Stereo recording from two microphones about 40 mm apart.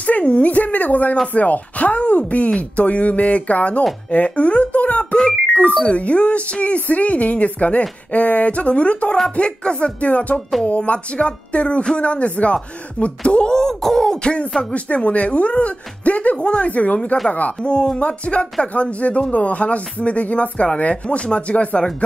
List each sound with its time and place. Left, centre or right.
0.0 s speech: left
13.6 s beatboxing: centre
14.6 s speech: left
17.6 s speech: left